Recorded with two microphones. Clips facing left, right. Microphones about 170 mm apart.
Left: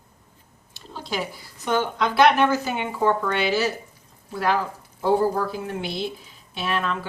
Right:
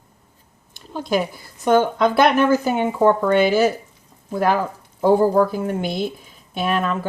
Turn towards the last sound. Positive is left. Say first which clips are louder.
# right 5 dB
turn(degrees=-45)  # may be behind; listen again after turning